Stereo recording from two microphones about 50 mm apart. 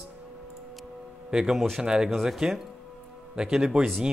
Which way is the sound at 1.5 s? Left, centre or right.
Centre.